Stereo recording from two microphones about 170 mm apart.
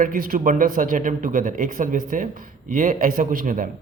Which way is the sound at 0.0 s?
55° right (ahead or behind).